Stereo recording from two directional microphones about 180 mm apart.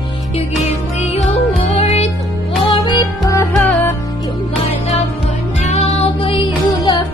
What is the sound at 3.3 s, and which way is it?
Music, 15° left (ahead or behind).